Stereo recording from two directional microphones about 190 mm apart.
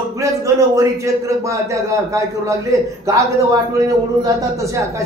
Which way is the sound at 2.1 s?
15° right (ahead or behind).